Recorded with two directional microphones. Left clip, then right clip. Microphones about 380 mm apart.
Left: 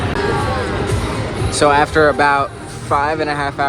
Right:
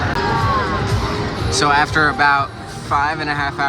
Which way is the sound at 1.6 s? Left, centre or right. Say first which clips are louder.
Left 3 dB; centre.